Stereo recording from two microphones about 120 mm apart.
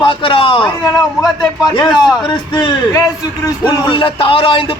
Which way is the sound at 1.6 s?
35° left (ahead or behind).